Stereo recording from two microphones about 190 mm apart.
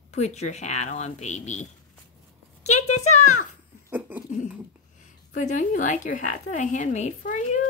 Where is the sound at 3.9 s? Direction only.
10° right (ahead or behind).